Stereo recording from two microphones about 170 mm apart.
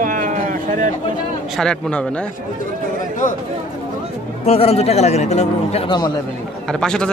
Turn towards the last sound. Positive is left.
turn(degrees=5)  # may be behind; listen again after turning